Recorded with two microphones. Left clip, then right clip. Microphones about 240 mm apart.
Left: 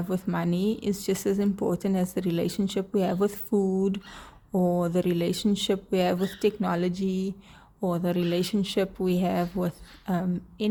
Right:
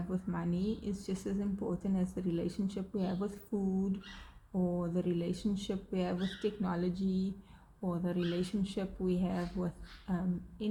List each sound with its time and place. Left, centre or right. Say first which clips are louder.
0.1 s speech: left 10 dB; left